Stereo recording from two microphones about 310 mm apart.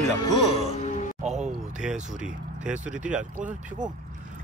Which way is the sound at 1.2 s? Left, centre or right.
Right.